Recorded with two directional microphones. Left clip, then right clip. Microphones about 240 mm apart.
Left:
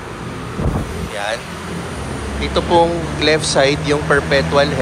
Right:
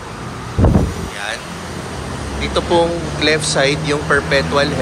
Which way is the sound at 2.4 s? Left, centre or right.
Centre.